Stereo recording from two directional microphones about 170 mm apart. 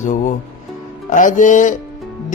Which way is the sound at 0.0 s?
50° left (ahead or behind).